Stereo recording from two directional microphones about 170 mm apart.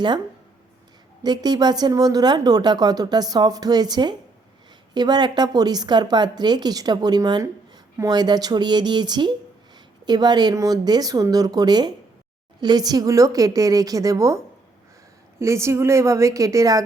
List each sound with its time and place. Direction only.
1.2 s a woman's voice: 25° right (ahead or behind)